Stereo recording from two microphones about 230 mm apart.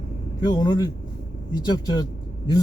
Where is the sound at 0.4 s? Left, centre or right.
Centre.